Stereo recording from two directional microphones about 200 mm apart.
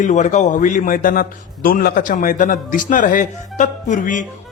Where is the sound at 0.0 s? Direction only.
35° left (ahead or behind).